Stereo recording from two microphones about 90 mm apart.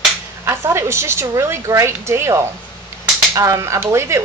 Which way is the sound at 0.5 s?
30° right (ahead or behind).